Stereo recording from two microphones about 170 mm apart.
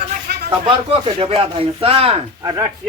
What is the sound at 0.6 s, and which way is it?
Speech, 30° right (ahead or behind).